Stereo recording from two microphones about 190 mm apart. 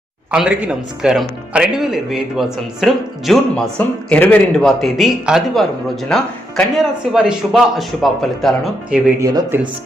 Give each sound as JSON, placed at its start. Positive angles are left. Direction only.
{"t": 0.3, "sound": "speech", "side_deg": -5}
{"t": 9.2, "sound": "speech", "side_deg": -15}